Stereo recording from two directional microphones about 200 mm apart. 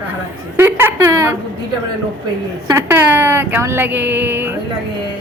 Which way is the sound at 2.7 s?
10° right (ahead or behind).